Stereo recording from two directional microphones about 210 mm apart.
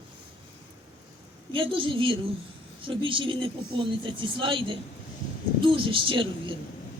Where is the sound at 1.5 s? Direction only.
25° right (ahead or behind).